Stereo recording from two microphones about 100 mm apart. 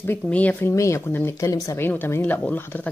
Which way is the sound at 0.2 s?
15° left (ahead or behind).